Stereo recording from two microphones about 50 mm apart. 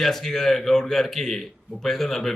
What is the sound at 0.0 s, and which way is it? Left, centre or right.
A man's voice, centre.